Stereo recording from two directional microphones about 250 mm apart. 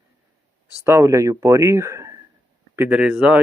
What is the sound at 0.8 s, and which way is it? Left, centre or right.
Speech, centre.